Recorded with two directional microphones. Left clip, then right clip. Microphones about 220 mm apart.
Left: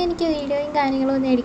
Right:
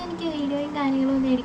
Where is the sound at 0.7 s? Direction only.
25° left (ahead or behind).